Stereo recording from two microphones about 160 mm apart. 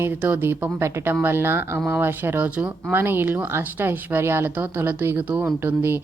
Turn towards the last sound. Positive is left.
turn(degrees=-15)  # may be behind; listen again after turning